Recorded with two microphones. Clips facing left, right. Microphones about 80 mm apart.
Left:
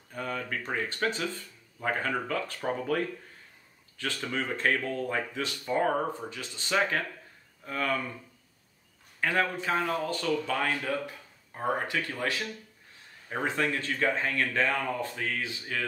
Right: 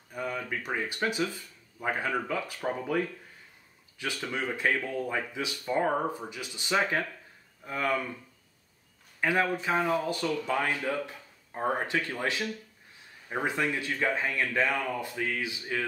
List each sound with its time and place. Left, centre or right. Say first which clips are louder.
0.1 s speech: even; centre
9.2 s speech: right 1 dB; centre